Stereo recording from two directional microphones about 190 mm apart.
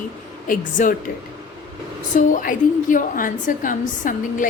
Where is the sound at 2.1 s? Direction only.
45° left (ahead or behind).